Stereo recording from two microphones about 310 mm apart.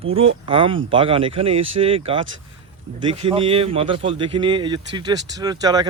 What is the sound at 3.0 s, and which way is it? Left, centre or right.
A man's voice, centre.